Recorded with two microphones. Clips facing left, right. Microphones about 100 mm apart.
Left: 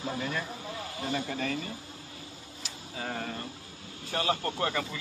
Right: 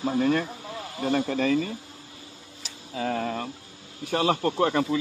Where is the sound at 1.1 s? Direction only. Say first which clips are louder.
Right 9 dB; 70° right (ahead or behind).